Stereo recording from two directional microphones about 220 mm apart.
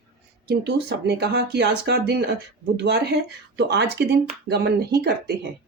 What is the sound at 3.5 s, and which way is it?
Speech, 50° right (ahead or behind).